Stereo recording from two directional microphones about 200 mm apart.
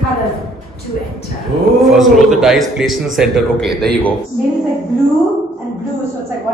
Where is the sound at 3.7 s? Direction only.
55° right (ahead or behind).